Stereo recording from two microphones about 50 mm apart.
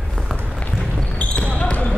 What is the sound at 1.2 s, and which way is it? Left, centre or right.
Basketball bounce, left.